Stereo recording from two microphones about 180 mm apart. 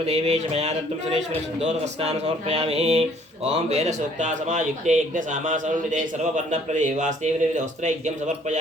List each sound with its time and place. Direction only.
0.0 s speech: 35° right (ahead or behind)